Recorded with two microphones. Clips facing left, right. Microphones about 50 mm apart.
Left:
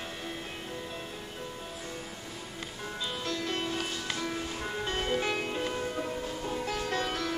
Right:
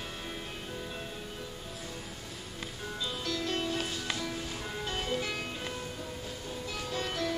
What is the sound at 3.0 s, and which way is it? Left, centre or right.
Music, left.